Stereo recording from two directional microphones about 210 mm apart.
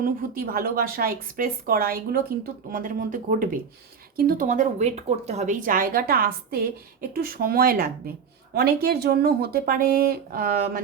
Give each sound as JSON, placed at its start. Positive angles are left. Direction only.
{"t": 0.0, "sound": "a woman's voice", "side_deg": -45}